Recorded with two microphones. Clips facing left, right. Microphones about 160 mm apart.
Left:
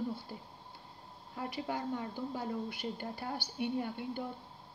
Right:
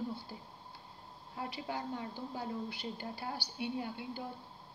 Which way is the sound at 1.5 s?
50° left (ahead or behind).